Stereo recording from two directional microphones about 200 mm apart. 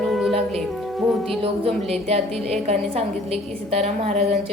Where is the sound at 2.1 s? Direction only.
30° right (ahead or behind).